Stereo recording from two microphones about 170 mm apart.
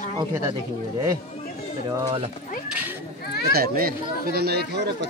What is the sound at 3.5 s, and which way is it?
Speech, 60° right (ahead or behind).